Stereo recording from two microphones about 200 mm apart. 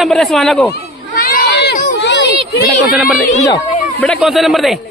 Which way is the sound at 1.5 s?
60° left (ahead or behind).